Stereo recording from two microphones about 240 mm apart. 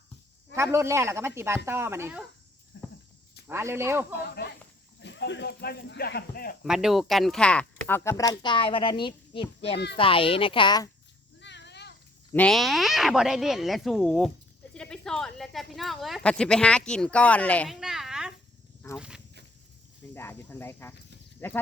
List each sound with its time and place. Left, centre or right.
0.5 s speech: centre
2.7 s a sound: left
3.4 s speech: centre
4.1 s speech: left
6.7 s speech: centre
11.3 s a sound: left
12.3 s speech: centre
20.1 s speech: centre